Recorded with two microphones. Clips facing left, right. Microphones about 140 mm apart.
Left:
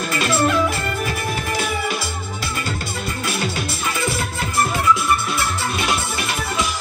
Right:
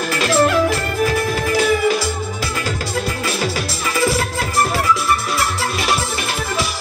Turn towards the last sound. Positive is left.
turn(degrees=-90)